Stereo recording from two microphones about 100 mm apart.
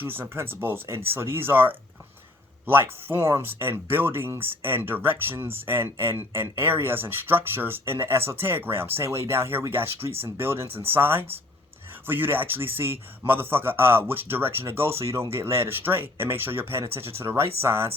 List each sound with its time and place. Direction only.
0.0 s speech: 20° right (ahead or behind)